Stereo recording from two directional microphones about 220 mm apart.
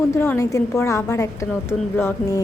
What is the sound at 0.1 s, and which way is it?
A woman's voice, 10° left (ahead or behind).